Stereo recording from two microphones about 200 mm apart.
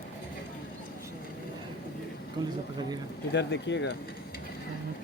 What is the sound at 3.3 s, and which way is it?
Speech, 60° left (ahead or behind).